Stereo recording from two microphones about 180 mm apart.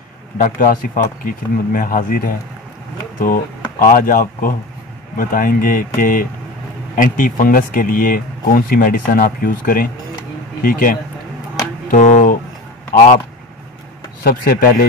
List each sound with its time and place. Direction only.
0.4 s speech: 50° left (ahead or behind)
3.8 s speech: 50° left (ahead or behind)
14.2 s speech: 55° left (ahead or behind)